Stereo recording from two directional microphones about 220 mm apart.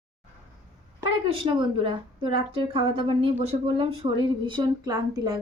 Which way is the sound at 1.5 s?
20° right (ahead or behind).